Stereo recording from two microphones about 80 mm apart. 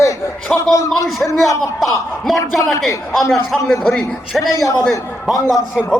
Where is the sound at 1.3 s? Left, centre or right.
Left.